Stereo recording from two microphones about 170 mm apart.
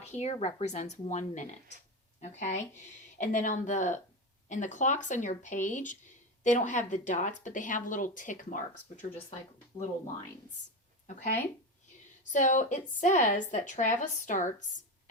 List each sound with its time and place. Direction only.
0.1 s speech: 40° left (ahead or behind)
11.0 s a sound: 45° left (ahead or behind)
12.3 s speech: 45° left (ahead or behind)